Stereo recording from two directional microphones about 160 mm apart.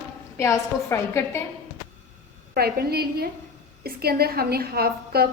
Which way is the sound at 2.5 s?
75° right (ahead or behind).